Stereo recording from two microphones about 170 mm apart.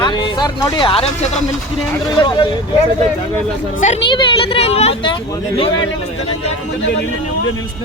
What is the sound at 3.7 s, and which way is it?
Speech, 45° left (ahead or behind).